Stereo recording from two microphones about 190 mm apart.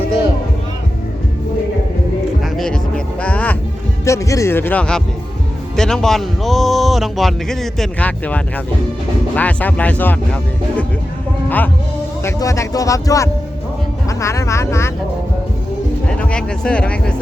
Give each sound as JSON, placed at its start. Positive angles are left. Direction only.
{"t": 2.4, "sound": "music", "side_deg": 5}
{"t": 4.0, "sound": "speech", "side_deg": 15}
{"t": 11.4, "sound": "speech", "side_deg": 10}
{"t": 16.0, "sound": "speech", "side_deg": 5}